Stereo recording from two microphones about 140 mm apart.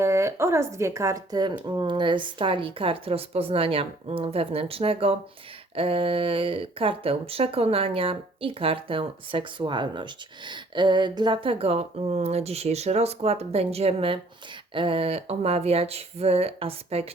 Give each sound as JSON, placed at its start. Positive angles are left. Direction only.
{"t": 0.0, "sound": "speech", "side_deg": -20}